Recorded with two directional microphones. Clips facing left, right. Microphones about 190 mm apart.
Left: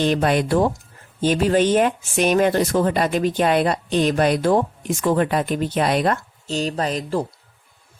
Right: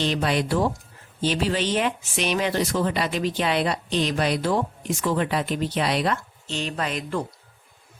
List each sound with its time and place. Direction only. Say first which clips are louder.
0.0 s speech: left 5 dB; 50° left (ahead or behind)